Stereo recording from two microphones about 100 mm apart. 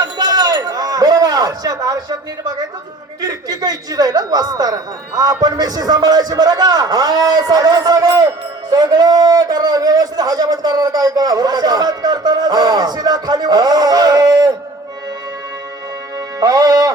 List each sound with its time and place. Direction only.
0.0 s a sound: 40° right (ahead or behind)
3.2 s a man's voice: 40° right (ahead or behind)
16.4 s a man's voice: 40° right (ahead or behind)